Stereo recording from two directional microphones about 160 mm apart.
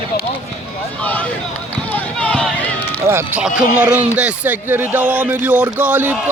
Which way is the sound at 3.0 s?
15° right (ahead or behind).